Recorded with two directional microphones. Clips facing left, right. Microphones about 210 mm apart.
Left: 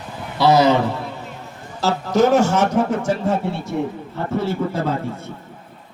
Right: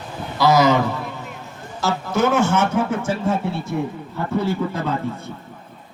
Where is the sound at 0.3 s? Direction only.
30° left (ahead or behind).